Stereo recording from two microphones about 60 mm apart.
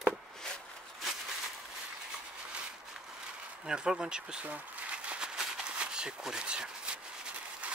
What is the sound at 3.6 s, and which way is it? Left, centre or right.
Speech, centre.